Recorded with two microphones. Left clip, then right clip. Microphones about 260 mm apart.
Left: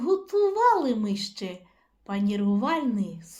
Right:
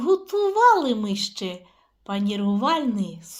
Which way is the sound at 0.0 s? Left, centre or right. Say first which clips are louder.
Right 4 dB; centre.